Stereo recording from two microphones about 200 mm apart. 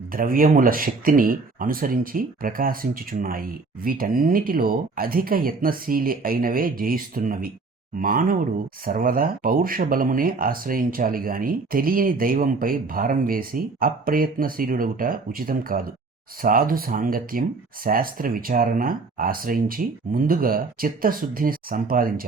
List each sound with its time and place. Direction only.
0.1 s speech: 45° right (ahead or behind)